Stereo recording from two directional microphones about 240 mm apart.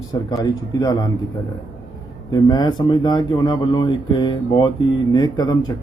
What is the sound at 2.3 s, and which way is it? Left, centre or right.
Speech, centre.